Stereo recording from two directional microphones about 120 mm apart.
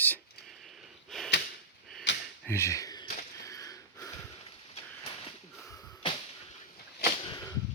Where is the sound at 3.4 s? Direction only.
25° left (ahead or behind).